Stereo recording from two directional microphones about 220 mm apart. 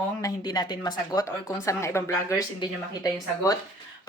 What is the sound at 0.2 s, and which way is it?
A woman's voice, 15° left (ahead or behind).